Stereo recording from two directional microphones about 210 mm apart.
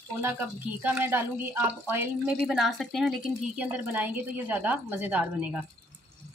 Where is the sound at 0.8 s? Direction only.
10° right (ahead or behind).